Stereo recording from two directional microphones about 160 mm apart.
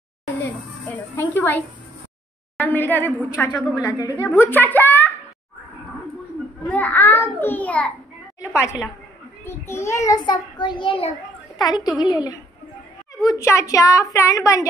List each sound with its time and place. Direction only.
0.5 s a sound: 10° left (ahead or behind)
2.5 s a child's voice: 15° left (ahead or behind)
3.7 s a child's voice: 25° left (ahead or behind)
4.4 s a child's voice: 10° left (ahead or behind)
6.7 s a child's voice: 10° left (ahead or behind)